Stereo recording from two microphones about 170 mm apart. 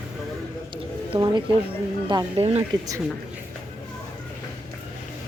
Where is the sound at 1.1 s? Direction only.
25° right (ahead or behind).